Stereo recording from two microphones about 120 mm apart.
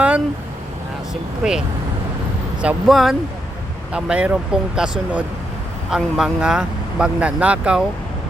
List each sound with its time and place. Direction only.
1.4 s speech: 5° right (ahead or behind)